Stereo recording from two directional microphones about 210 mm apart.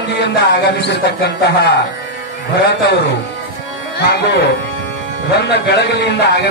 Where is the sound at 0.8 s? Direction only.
55° left (ahead or behind).